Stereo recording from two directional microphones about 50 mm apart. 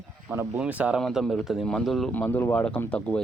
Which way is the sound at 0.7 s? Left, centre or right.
Right.